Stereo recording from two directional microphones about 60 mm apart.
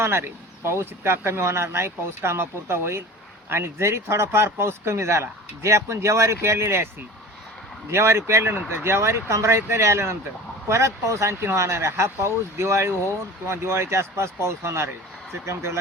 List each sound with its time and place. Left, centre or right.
0.0 s speech: right
7.9 s speech: right